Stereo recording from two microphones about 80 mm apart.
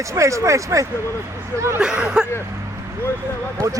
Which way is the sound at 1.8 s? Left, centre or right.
Centre.